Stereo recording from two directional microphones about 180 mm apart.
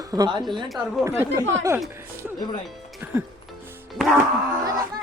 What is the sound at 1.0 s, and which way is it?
Music, 10° right (ahead or behind).